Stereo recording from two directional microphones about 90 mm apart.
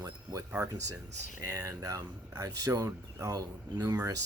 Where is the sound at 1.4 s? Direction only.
35° right (ahead or behind).